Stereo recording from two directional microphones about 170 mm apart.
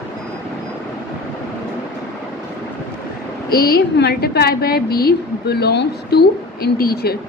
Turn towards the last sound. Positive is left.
turn(degrees=65)  # may be behind; listen again after turning